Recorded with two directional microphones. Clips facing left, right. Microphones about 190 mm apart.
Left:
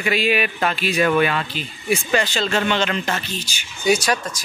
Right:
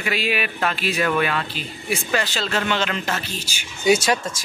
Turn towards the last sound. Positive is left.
turn(degrees=-25)  # may be behind; listen again after turning